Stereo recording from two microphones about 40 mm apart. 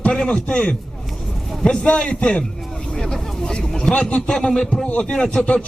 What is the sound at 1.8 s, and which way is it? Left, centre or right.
Speech, left.